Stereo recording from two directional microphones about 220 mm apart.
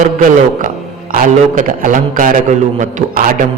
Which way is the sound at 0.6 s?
40° right (ahead or behind).